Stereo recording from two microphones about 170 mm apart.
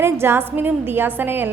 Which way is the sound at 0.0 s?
15° right (ahead or behind).